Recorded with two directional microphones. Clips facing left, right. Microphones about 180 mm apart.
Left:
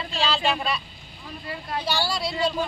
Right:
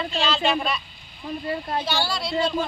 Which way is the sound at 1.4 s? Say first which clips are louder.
Right 4 dB; 35° right (ahead or behind).